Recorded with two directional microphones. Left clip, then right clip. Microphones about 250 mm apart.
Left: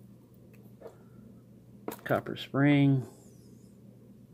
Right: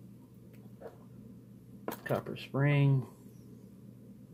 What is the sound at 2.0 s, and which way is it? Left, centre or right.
Speech, left.